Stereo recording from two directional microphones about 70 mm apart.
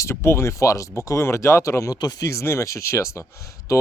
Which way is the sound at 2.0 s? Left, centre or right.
Left.